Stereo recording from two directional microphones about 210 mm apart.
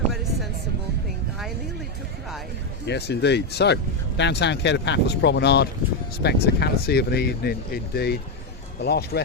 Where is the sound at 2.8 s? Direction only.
55° left (ahead or behind).